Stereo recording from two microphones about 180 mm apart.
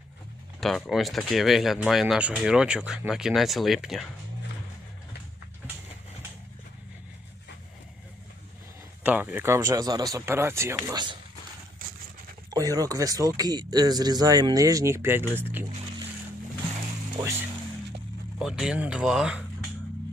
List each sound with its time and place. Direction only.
0.6 s speech: centre (ahead or behind)
9.0 s speech: 10° right (ahead or behind)
12.5 s speech: 20° right (ahead or behind)
18.3 s speech: 5° right (ahead or behind)